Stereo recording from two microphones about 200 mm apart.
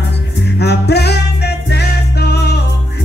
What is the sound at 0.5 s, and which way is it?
Music, 55° left (ahead or behind).